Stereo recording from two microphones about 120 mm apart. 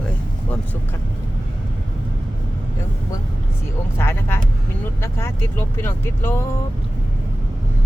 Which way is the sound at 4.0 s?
20° left (ahead or behind).